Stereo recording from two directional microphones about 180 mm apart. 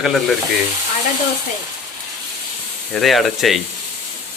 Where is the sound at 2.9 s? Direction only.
Centre (ahead or behind).